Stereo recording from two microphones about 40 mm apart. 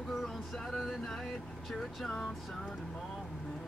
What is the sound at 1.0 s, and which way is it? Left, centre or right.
Vehicle, centre.